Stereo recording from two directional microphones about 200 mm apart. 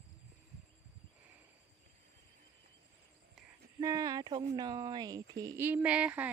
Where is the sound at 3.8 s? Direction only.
15° right (ahead or behind).